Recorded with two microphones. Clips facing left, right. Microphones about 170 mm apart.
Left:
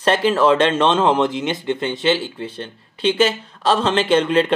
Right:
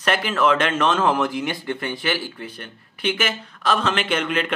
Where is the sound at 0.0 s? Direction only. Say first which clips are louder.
Left 5 dB; 30° left (ahead or behind).